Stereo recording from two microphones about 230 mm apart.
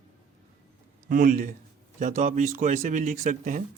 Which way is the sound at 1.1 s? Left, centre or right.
Right.